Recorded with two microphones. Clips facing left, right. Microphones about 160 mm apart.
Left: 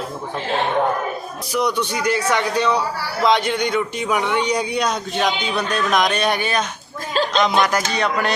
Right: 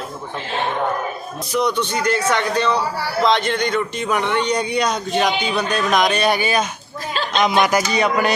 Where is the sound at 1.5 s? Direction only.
10° left (ahead or behind).